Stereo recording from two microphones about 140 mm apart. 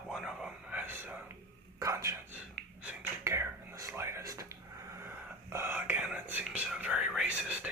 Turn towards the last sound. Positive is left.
turn(degrees=-10)  # may be behind; listen again after turning